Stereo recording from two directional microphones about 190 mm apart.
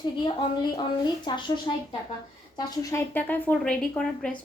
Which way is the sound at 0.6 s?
25° left (ahead or behind).